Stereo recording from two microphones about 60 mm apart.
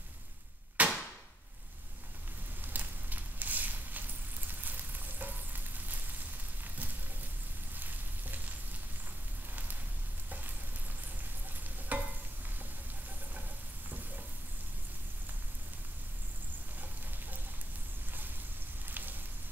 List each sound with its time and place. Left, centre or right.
0.8 s hammer: right
2.6 s a sound: right
4.5 s frying: right
7.7 s frying: right
11.9 s stir: right
13.8 s stir: right
18.9 s a sound: right